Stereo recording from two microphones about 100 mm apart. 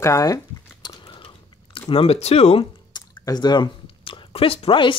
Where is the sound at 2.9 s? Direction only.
40° left (ahead or behind).